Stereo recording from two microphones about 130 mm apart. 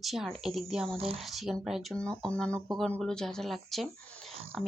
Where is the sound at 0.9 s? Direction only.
50° right (ahead or behind).